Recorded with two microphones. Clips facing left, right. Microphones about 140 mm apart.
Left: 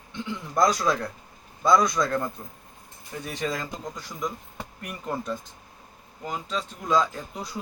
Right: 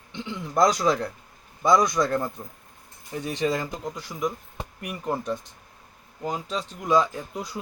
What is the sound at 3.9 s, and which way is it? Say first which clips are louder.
A man's voice: right 3 dB; 10° right (ahead or behind).